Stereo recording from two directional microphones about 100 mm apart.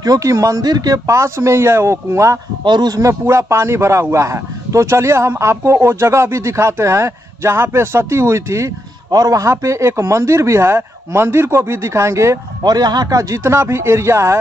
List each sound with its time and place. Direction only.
0.0 s speech: 35° right (ahead or behind)
2.6 s a man's voice: 45° right (ahead or behind); by 12.4 s 30° right (ahead or behind)
12.6 s a man's voice: 45° right (ahead or behind); by 14.4 s 30° right (ahead or behind)